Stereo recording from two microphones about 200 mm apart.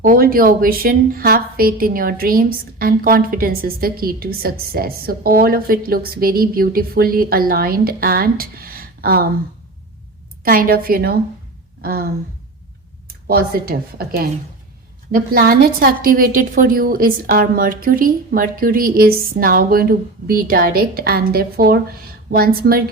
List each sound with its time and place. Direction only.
0.0 s a woman's voice: 45° right (ahead or behind)
10.4 s a woman's voice: 45° right (ahead or behind)
13.2 s a woman's voice: 50° right (ahead or behind)